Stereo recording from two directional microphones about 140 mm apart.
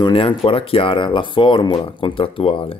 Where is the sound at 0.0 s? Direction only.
40° left (ahead or behind).